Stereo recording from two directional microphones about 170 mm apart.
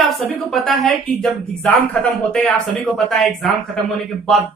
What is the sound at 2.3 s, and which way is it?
Speech, 5° left (ahead or behind).